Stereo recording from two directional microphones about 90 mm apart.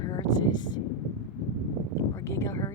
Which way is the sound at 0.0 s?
45° left (ahead or behind).